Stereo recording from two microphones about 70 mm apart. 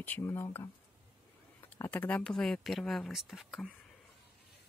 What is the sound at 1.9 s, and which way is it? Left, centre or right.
Speech, left.